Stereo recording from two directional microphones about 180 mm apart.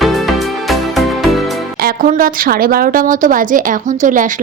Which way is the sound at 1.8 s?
50° right (ahead or behind).